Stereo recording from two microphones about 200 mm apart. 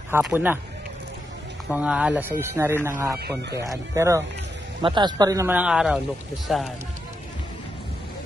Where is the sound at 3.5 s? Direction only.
15° right (ahead or behind).